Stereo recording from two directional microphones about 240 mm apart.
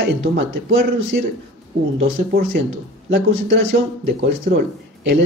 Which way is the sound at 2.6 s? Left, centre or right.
Right.